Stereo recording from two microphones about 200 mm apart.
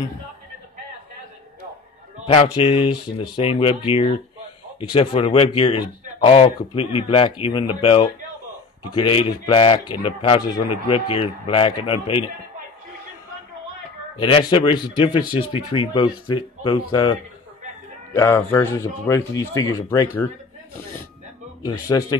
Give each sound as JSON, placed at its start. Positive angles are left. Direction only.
{"t": 2.2, "sound": "speech", "side_deg": 25}
{"t": 14.1, "sound": "a man's voice", "side_deg": 25}
{"t": 21.6, "sound": "speech", "side_deg": 20}